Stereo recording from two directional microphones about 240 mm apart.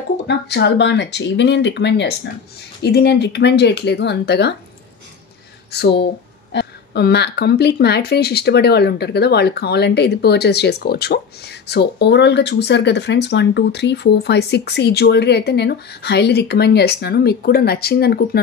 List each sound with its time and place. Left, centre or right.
0.3 s speech: left
5.7 s speech: left